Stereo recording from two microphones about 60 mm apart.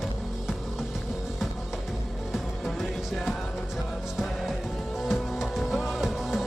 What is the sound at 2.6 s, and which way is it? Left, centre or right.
Music, centre.